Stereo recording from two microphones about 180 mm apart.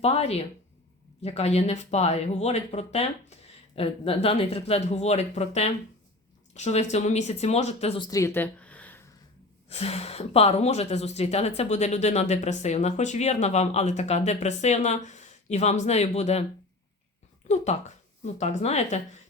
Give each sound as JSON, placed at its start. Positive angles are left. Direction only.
{"t": 0.0, "sound": "speech", "side_deg": 35}
{"t": 9.6, "sound": "speech", "side_deg": 35}
{"t": 17.5, "sound": "speech", "side_deg": 40}